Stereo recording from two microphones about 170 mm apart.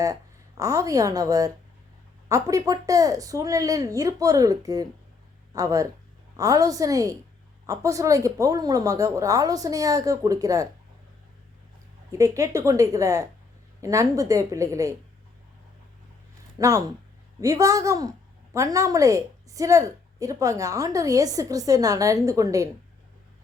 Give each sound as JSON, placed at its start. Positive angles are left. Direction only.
{"t": 0.0, "sound": "a woman's voice", "side_deg": -20}
{"t": 12.1, "sound": "a woman's voice", "side_deg": -20}
{"t": 16.6, "sound": "a woman's voice", "side_deg": -20}